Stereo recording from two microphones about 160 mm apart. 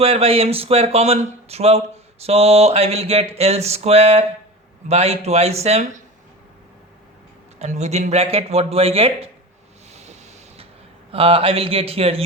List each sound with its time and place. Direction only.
0.0 s speech: 40° right (ahead or behind)
7.6 s speech: 45° right (ahead or behind)
9.9 s boat: 45° right (ahead or behind)
11.1 s speech: 35° right (ahead or behind)